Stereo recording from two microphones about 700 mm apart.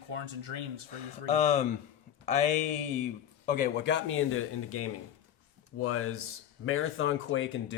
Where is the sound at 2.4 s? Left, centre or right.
Left.